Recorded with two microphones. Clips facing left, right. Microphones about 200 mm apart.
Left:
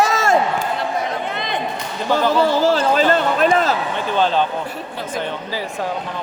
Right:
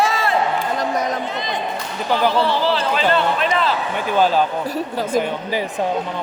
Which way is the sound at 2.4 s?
45° left (ahead or behind).